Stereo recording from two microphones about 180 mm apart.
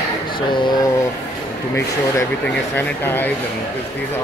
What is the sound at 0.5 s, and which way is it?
Speech, 25° left (ahead or behind).